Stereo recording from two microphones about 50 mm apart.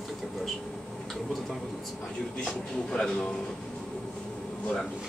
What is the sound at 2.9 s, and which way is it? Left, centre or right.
Speech, centre.